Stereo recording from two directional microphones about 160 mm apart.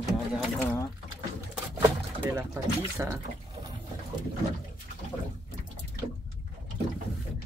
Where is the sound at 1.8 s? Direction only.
10° right (ahead or behind).